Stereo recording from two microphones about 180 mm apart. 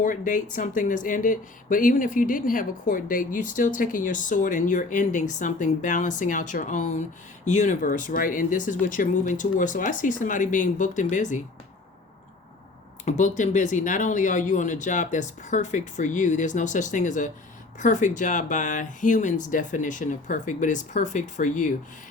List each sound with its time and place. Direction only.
0.0 s speech: 45° left (ahead or behind)
13.1 s speech: 40° left (ahead or behind)